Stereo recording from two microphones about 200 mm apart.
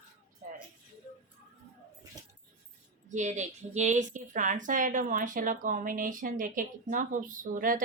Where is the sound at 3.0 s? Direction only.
35° right (ahead or behind).